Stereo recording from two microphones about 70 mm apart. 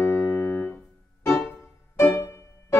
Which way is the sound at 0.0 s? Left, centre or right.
Left.